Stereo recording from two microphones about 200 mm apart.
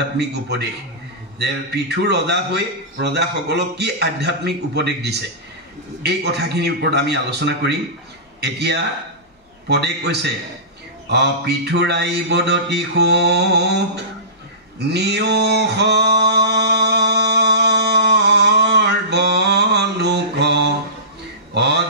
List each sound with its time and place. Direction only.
0.2 s a man's voice: 55° right (ahead or behind)
14.8 s male singing: 55° right (ahead or behind)
21.5 s a sound: 55° right (ahead or behind)